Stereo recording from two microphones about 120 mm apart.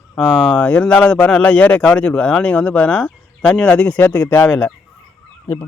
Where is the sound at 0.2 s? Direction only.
5° left (ahead or behind).